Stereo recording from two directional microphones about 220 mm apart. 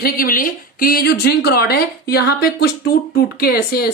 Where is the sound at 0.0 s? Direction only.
40° left (ahead or behind).